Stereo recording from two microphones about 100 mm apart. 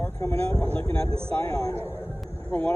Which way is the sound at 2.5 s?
15° left (ahead or behind).